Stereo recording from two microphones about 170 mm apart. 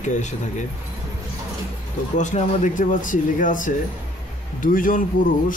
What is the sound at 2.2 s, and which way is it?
Speech, 45° left (ahead or behind).